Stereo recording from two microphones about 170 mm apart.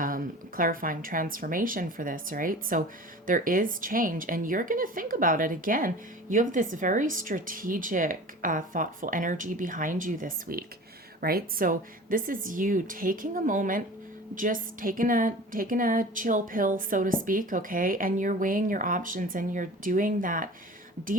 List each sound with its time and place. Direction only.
0.0 s a woman's voice: 55° right (ahead or behind)